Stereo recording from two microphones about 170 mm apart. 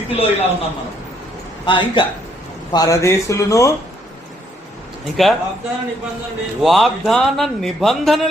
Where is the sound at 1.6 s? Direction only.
30° left (ahead or behind).